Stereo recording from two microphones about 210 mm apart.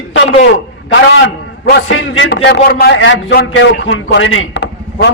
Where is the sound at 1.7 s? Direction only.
65° left (ahead or behind).